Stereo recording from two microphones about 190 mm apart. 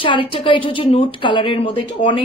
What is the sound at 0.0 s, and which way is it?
Speech, 25° left (ahead or behind).